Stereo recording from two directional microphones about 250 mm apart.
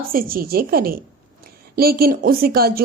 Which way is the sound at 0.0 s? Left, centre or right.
Right.